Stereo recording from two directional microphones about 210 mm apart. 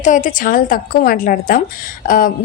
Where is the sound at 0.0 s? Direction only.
35° left (ahead or behind).